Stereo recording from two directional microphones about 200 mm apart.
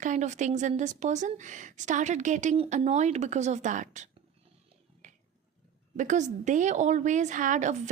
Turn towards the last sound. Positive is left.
turn(degrees=-35)  # may be behind; listen again after turning